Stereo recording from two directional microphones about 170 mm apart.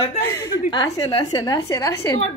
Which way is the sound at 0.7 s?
25° left (ahead or behind).